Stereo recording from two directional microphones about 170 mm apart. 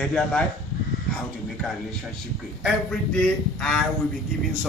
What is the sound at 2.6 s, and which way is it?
A man's voice, 5° left (ahead or behind).